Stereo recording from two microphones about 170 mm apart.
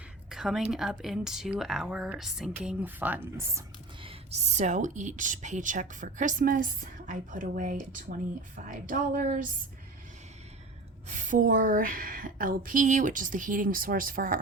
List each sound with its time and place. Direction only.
0.3 s speech: 5° right (ahead or behind)
4.0 s speech: 35° right (ahead or behind); by 9.5 s 55° right (ahead or behind)
11.1 s speech: 50° right (ahead or behind)